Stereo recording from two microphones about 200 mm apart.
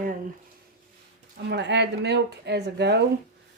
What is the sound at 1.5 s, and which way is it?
Speech, 60° right (ahead or behind).